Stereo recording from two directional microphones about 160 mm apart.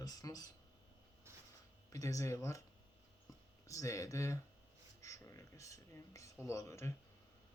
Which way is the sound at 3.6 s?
20° left (ahead or behind).